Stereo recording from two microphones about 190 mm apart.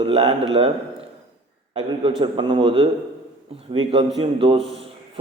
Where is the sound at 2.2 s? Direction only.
25° right (ahead or behind).